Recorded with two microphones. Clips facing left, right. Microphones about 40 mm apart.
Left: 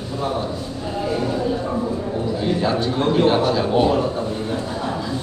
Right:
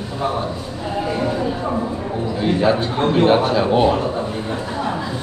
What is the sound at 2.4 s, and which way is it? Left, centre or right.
A man's voice, centre.